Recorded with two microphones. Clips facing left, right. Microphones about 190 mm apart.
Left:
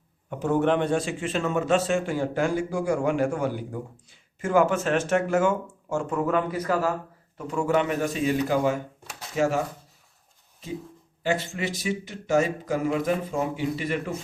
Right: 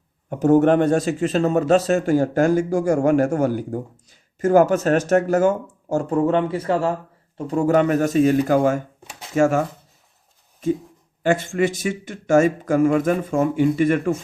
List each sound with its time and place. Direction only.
0.3 s a man's voice: 45° right (ahead or behind)